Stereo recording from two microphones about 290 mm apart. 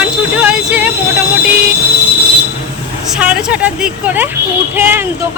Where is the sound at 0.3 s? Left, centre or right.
Centre.